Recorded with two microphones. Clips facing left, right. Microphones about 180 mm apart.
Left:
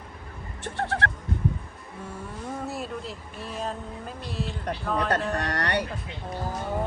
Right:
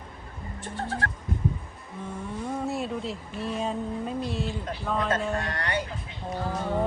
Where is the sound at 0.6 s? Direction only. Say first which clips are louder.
Left 3 dB; 70° left (ahead or behind).